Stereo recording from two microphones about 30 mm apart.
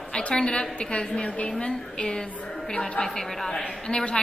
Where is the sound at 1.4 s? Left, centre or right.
Left.